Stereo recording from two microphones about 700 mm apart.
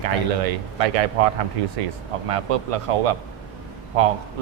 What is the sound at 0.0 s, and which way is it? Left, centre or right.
Speech, right.